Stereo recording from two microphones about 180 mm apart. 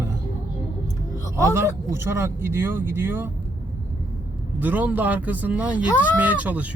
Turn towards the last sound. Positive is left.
turn(degrees=-10)  # may be behind; listen again after turning